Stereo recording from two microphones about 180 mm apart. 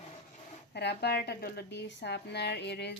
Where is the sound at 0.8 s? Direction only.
65° left (ahead or behind).